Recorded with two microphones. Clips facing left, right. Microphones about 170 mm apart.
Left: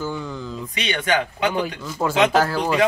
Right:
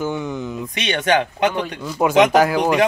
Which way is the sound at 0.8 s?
70° right (ahead or behind).